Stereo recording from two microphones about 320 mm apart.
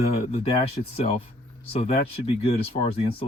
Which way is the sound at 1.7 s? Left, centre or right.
Centre.